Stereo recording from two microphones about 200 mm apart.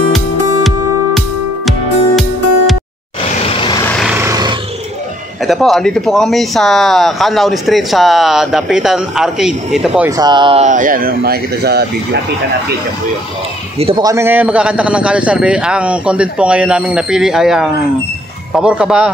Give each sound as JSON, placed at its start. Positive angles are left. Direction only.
{"t": 1.7, "sound": "music", "side_deg": 0}
{"t": 3.4, "sound": "vehicle", "side_deg": 25}
{"t": 4.0, "sound": "a sound", "side_deg": -10}
{"t": 5.4, "sound": "speech", "side_deg": 0}
{"t": 10.0, "sound": "speech", "side_deg": -20}
{"t": 10.7, "sound": "speech", "side_deg": -40}
{"t": 13.7, "sound": "speech", "side_deg": -30}
{"t": 14.0, "sound": "speech", "side_deg": -10}